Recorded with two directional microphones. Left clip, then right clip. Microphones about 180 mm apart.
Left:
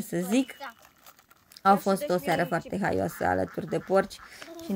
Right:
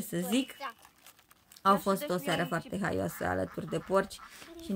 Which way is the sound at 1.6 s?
15° left (ahead or behind).